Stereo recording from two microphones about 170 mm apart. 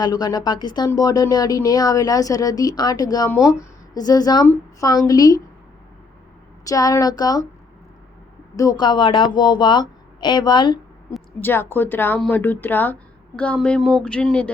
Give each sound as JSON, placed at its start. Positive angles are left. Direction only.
{"t": 0.0, "sound": "speech", "side_deg": 25}
{"t": 6.7, "sound": "speech", "side_deg": 20}
{"t": 8.5, "sound": "speech", "side_deg": 25}
{"t": 11.3, "sound": "speech", "side_deg": 10}